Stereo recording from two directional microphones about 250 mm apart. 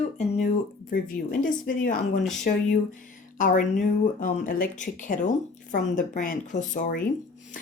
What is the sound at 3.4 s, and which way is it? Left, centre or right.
Speech, left.